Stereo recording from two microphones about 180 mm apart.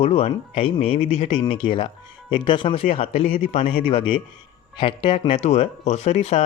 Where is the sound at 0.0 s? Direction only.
35° left (ahead or behind).